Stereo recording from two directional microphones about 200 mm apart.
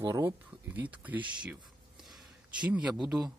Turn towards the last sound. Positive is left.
turn(degrees=-5)  # may be behind; listen again after turning